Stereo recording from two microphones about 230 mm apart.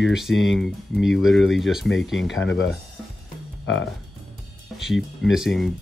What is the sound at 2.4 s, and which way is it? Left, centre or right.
Speech, left.